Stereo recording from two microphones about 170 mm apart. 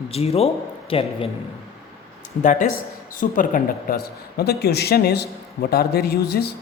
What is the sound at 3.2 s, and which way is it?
Speech, 50° left (ahead or behind).